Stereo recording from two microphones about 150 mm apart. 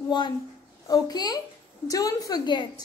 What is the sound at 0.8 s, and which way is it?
A woman's voice, 25° left (ahead or behind).